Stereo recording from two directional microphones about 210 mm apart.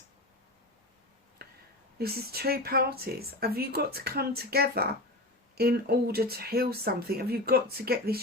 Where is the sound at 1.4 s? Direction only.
50° right (ahead or behind).